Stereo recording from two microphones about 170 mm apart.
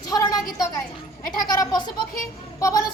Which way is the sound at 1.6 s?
25° left (ahead or behind).